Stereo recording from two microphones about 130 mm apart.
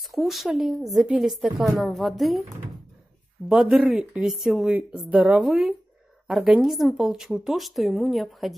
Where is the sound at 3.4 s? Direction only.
5° right (ahead or behind).